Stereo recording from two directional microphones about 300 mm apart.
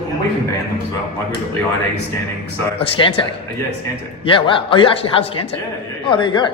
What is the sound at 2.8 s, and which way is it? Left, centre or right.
Speech, centre.